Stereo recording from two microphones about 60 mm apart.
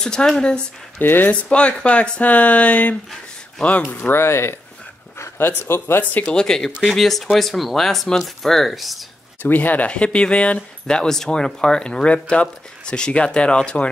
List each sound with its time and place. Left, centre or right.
0.0 s speech: centre
0.9 s speech: left
1.3 s speech: left
4.1 s speech: left
6.2 s speech: centre
9.4 s speech: left